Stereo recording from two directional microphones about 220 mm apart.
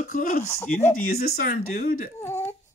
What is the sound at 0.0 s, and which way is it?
Speech, 40° left (ahead or behind).